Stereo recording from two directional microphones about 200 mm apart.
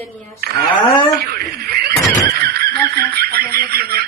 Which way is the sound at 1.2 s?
50° right (ahead or behind).